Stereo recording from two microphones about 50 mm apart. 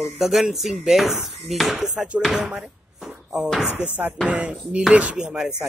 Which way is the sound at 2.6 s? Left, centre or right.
Centre.